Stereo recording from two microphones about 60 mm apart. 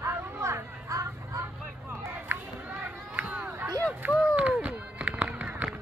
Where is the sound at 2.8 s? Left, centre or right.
Right.